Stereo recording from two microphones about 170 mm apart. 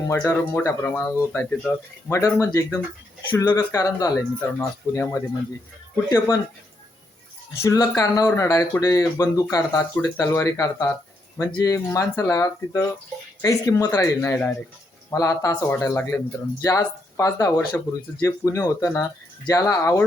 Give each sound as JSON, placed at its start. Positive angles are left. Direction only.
{"t": 0.1, "sound": "speech", "side_deg": 15}
{"t": 7.6, "sound": "speech", "side_deg": 20}